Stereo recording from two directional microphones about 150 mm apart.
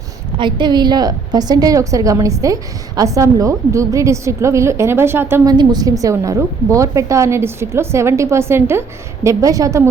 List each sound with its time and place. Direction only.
0.3 s a woman's voice: 30° right (ahead or behind); by 5.5 s 15° right (ahead or behind)
5.5 s a woman's voice: 25° right (ahead or behind)